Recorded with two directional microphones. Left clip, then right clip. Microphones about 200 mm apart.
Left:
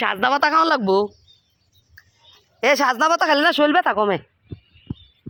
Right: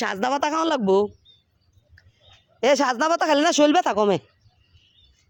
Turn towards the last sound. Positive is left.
turn(degrees=-25)  # may be behind; listen again after turning